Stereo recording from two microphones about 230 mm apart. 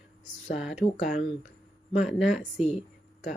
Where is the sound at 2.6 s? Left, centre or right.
Left.